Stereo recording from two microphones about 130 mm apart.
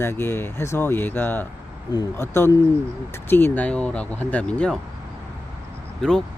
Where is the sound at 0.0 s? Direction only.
20° left (ahead or behind).